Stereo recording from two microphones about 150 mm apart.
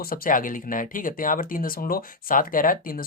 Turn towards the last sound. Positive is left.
turn(degrees=70)  # may be behind; listen again after turning